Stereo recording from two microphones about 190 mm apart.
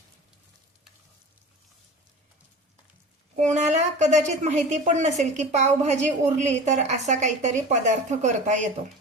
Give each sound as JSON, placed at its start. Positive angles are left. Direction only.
{"t": 3.3, "sound": "a woman's voice", "side_deg": -40}